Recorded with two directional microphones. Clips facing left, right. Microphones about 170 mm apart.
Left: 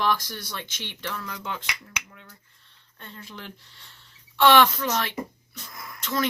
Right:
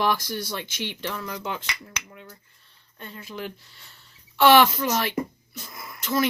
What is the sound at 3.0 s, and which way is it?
Speech, 10° right (ahead or behind).